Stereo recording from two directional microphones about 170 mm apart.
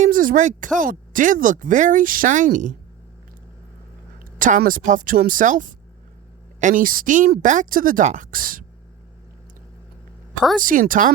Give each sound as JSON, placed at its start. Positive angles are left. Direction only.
{"t": 0.0, "sound": "speech", "side_deg": -55}
{"t": 4.2, "sound": "speech", "side_deg": -50}
{"t": 10.6, "sound": "speech", "side_deg": -55}